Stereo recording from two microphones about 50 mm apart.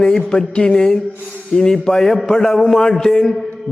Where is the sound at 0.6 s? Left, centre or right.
Centre.